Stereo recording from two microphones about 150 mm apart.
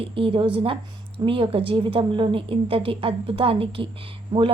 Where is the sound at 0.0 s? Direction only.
35° right (ahead or behind).